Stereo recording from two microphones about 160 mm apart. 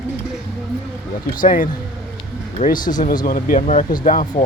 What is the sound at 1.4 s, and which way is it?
Speech, 55° left (ahead or behind).